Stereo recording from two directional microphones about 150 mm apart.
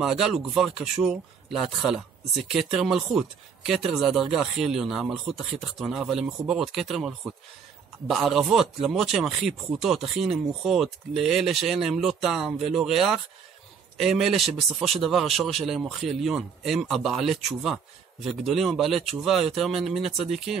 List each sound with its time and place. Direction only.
0.0 s speech: centre (ahead or behind)